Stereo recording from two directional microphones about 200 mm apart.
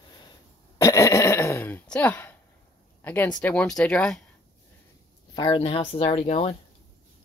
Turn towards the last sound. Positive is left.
turn(degrees=30)  # may be behind; listen again after turning